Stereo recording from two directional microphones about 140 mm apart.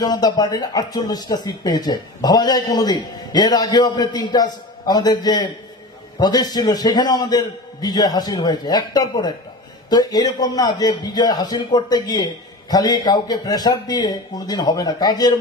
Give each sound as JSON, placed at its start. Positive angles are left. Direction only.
{"t": 0.0, "sound": "speech", "side_deg": 30}